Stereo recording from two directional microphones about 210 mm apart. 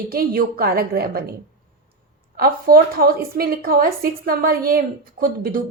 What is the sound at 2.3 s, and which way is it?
A woman's voice, 45° right (ahead or behind).